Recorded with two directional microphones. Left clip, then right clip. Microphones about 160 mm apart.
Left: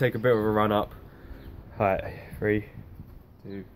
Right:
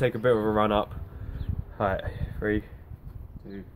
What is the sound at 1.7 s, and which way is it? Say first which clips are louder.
Speech: left 3 dB; 30° left (ahead or behind).